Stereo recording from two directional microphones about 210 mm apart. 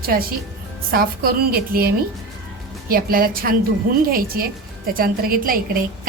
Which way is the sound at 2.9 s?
45° right (ahead or behind).